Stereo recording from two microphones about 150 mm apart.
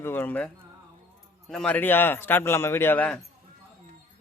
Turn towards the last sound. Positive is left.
turn(degrees=10)  # may be behind; listen again after turning